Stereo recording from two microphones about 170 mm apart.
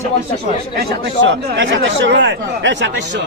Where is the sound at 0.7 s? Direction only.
90° right.